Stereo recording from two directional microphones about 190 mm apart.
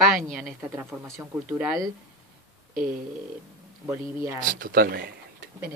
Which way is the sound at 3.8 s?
15° right (ahead or behind).